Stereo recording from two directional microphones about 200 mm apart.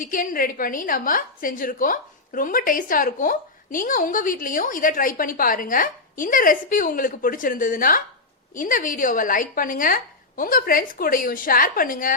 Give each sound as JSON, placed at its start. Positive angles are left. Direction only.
{"t": 0.0, "sound": "a woman's voice", "side_deg": 45}